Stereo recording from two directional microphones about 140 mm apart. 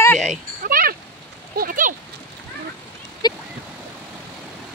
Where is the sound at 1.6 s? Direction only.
75° right (ahead or behind).